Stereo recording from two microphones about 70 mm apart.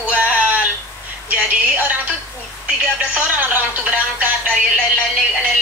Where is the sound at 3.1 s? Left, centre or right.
Right.